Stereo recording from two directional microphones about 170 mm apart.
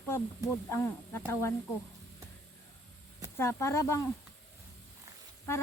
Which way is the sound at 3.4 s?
15° left (ahead or behind).